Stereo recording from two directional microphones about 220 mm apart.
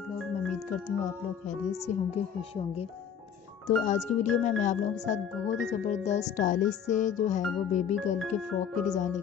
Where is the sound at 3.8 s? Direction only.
30° left (ahead or behind).